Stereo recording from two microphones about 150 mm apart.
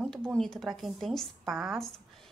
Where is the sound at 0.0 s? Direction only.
5° left (ahead or behind).